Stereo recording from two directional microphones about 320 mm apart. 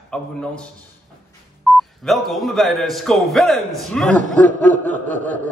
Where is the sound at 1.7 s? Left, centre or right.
Centre.